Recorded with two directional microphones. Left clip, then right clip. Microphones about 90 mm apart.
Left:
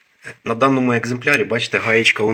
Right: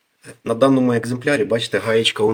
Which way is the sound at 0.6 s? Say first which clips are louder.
Even; 15° left (ahead or behind).